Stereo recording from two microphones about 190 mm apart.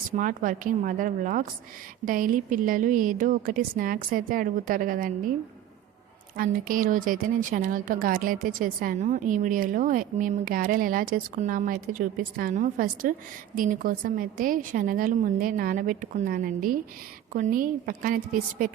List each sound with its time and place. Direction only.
0.2 s a woman's voice: 45° right (ahead or behind)
6.3 s a woman's voice: 45° right (ahead or behind)